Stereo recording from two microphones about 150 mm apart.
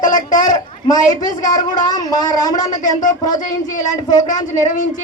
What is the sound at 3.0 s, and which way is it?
Speech, 60° left (ahead or behind).